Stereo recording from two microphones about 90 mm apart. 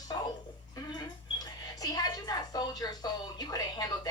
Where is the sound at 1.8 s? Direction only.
45° left (ahead or behind).